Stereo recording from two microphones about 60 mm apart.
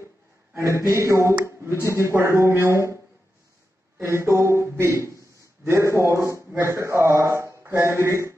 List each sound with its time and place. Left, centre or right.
0.6 s speech: right
4.0 s a man's voice: right